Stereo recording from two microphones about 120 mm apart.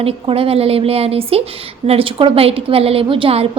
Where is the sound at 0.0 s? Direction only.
50° right (ahead or behind).